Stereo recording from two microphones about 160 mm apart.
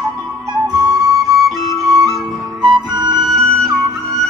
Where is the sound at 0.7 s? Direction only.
25° right (ahead or behind).